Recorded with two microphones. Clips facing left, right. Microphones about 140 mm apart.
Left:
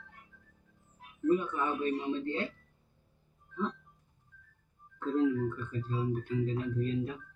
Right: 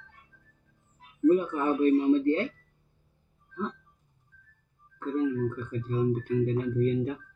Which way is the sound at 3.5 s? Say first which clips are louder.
Right 1 dB; centre (ahead or behind).